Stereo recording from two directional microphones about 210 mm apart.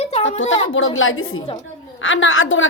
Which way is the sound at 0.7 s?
70° left (ahead or behind).